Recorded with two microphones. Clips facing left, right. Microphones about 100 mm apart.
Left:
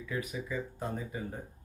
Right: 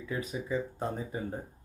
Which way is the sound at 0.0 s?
25° right (ahead or behind).